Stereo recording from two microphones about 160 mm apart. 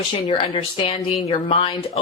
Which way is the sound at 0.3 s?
35° left (ahead or behind).